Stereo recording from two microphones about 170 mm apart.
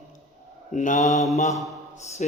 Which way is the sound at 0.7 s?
45° left (ahead or behind).